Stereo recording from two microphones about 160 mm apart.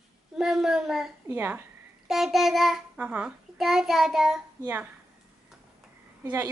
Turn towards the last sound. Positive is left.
turn(degrees=-15)  # may be behind; listen again after turning